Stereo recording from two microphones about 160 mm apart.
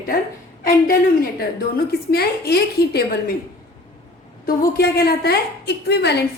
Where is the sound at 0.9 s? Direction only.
65° left (ahead or behind).